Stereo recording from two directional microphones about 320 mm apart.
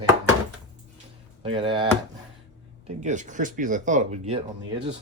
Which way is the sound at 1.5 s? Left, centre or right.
Centre.